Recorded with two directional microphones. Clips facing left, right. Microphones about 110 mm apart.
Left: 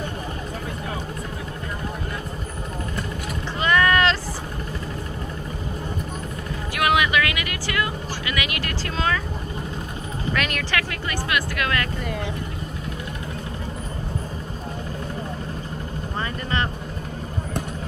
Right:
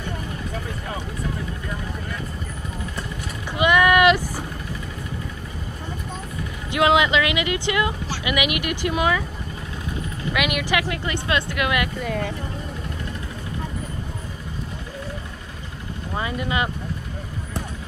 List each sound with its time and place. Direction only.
3.5 s vehicle: 15° right (ahead or behind)
6.7 s speech: 20° right (ahead or behind)
10.3 s speech: 10° right (ahead or behind)
16.2 s speech: 10° right (ahead or behind)